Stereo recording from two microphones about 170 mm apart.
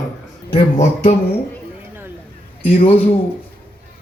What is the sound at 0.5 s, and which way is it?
Speech, 45° left (ahead or behind).